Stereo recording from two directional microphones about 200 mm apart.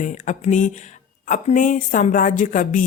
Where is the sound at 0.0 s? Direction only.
35° left (ahead or behind).